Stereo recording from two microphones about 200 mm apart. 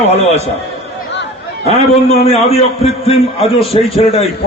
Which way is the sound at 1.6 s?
35° left (ahead or behind).